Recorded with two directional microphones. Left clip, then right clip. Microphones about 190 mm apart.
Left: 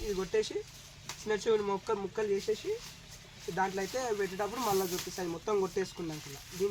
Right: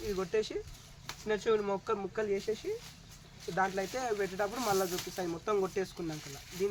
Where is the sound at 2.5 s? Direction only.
20° right (ahead or behind).